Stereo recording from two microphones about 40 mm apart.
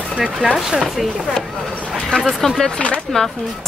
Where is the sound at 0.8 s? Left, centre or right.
Centre.